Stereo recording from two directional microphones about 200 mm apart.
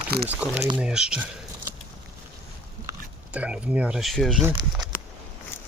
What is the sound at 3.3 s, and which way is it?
Speech, 5° right (ahead or behind).